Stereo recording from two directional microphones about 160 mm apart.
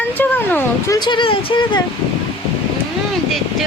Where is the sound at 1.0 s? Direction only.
30° left (ahead or behind).